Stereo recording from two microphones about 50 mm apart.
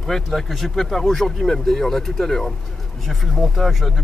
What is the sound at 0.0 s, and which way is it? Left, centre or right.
Speech, centre.